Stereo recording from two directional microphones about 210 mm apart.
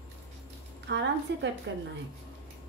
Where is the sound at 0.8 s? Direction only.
55° right (ahead or behind).